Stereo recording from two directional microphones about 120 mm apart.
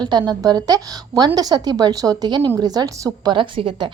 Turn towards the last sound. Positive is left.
turn(degrees=-45)  # may be behind; listen again after turning